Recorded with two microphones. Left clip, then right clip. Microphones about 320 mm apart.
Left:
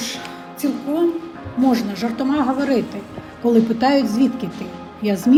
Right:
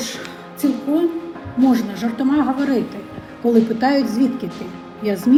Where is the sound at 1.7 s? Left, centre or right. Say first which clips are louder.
Even; left.